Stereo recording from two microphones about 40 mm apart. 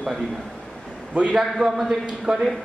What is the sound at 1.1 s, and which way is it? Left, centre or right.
Speech, right.